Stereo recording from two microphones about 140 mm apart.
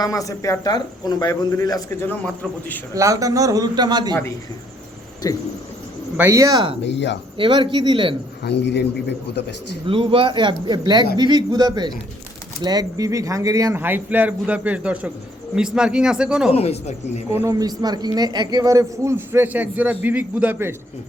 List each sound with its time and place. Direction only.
0.0 s speech: 25° left (ahead or behind)
2.0 s a man's voice: 10° left (ahead or behind)
2.9 s a man's voice: 25° right (ahead or behind)
5.2 s speech: 25° left (ahead or behind)
6.1 s a man's voice: 20° right (ahead or behind)
7.3 s speech: 40° right (ahead or behind)
9.8 s a man's voice: 40° right (ahead or behind); by 16.5 s 5° right (ahead or behind)
16.5 s speech: 45° left (ahead or behind)
17.3 s a man's voice: 20° right (ahead or behind)